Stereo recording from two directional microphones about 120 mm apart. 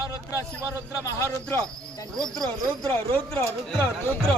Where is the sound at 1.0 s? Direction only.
25° left (ahead or behind).